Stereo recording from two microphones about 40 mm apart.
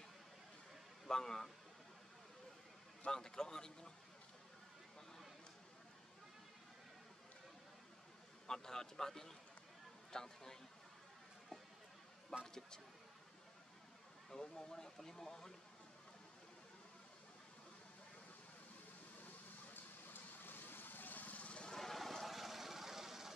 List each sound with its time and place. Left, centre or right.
1.0 s speech: centre
3.1 s speech: centre
8.5 s speech: centre
12.4 s speech: centre
14.3 s speech: centre
19.2 s vehicle: left
21.6 s vehicle: centre